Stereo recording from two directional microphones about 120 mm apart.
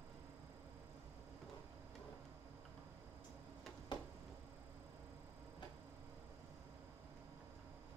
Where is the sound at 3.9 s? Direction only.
40° left (ahead or behind).